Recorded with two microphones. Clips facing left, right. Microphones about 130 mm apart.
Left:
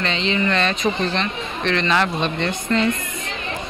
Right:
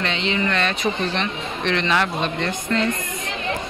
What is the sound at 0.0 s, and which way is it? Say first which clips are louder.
Speech: left 2 dB; 10° right (ahead or behind).